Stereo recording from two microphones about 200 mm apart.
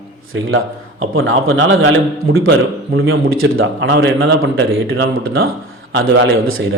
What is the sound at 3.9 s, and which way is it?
A man's voice, 60° right (ahead or behind).